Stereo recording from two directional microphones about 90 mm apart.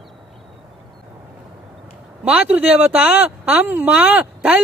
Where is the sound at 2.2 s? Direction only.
15° right (ahead or behind).